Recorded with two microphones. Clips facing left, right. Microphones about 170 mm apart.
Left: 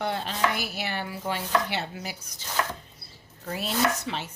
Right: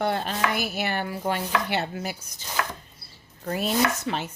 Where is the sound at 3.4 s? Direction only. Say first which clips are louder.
Right 3 dB; 50° right (ahead or behind).